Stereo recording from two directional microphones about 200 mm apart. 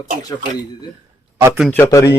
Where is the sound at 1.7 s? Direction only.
15° left (ahead or behind).